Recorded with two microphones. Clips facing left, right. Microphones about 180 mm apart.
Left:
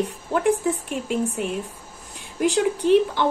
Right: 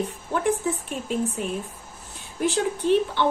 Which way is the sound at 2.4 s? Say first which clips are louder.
Left 3 dB; 15° left (ahead or behind).